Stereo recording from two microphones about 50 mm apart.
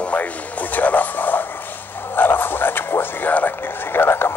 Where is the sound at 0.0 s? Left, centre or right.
Left.